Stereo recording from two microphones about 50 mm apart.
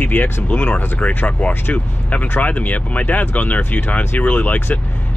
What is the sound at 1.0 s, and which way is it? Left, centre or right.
Speech, left.